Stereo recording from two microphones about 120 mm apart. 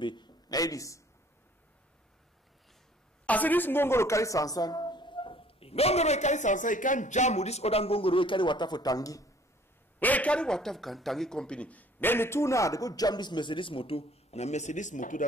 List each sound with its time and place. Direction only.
0.0 s a man's voice: 40° left (ahead or behind)
3.3 s a woman's voice: 15° left (ahead or behind); by 9.3 s 30° left (ahead or behind)
9.9 s speech: 15° left (ahead or behind); by 15.2 s 90° left